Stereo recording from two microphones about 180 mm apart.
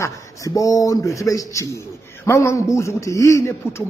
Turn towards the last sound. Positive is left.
turn(degrees=15)  # may be behind; listen again after turning